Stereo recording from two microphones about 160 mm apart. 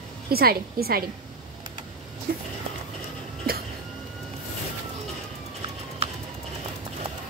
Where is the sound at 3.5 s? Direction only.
70° right (ahead or behind).